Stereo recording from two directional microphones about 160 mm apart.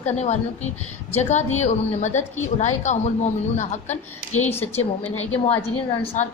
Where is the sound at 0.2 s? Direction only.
45° left (ahead or behind).